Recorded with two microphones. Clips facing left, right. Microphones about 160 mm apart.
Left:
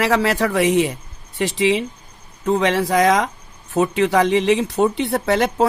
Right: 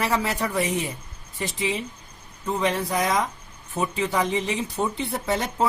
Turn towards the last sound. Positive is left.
turn(degrees=75)  # may be behind; listen again after turning